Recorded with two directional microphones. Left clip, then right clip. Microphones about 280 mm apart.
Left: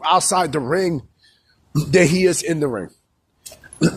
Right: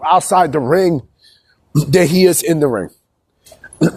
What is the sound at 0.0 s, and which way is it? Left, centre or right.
A man's voice, centre.